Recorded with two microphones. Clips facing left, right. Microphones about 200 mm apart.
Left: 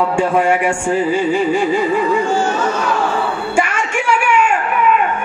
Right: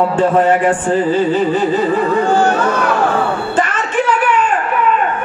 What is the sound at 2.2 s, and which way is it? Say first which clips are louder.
Chatter: right 3 dB; 60° right (ahead or behind).